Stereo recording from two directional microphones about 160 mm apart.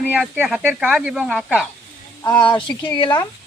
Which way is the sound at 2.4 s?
30° left (ahead or behind).